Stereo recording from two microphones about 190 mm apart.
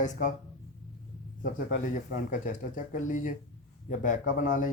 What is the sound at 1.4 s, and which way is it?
Speech, 45° left (ahead or behind).